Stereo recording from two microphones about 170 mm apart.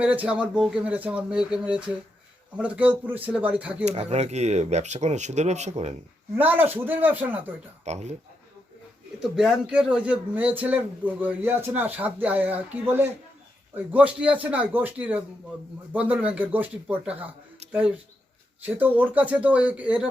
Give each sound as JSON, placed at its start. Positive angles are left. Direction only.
{"t": 0.0, "sound": "a man's voice", "side_deg": -5}
{"t": 3.8, "sound": "speech", "side_deg": -40}
{"t": 6.3, "sound": "a man's voice", "side_deg": -10}
{"t": 7.9, "sound": "speech", "side_deg": -40}
{"t": 9.2, "sound": "a man's voice", "side_deg": 0}